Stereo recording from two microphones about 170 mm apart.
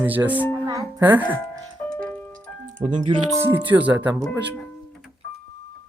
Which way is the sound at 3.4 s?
10° right (ahead or behind).